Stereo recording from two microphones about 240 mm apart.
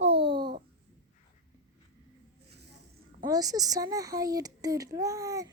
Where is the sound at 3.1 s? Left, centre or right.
Centre.